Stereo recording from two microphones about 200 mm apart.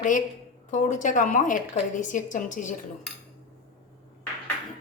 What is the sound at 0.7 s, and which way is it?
A woman's voice, 35° left (ahead or behind).